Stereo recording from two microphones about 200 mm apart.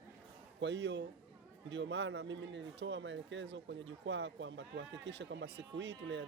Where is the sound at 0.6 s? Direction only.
60° right (ahead or behind).